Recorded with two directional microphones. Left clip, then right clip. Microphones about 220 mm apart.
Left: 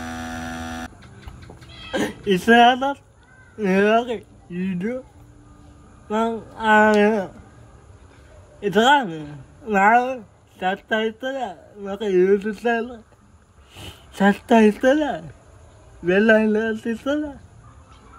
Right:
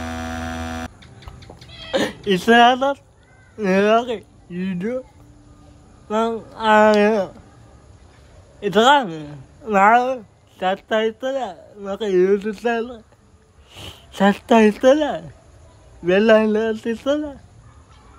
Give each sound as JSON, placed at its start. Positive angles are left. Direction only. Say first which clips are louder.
{"t": 0.0, "sound": "mains hum", "louder": "right 3 dB", "side_deg": 0}
{"t": 1.9, "sound": "cat", "louder": "right 2 dB", "side_deg": -10}
{"t": 2.5, "sound": "speech", "louder": "right 1 dB", "side_deg": -10}
{"t": 6.0, "sound": "speech", "louder": "right 2 dB", "side_deg": -5}
{"t": 8.5, "sound": "speech", "louder": "right 2 dB", "side_deg": -10}
{"t": 16.1, "sound": "speech", "louder": "right 2 dB", "side_deg": 0}